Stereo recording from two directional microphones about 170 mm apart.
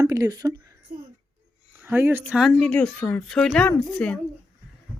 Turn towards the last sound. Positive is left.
turn(degrees=5)  # may be behind; listen again after turning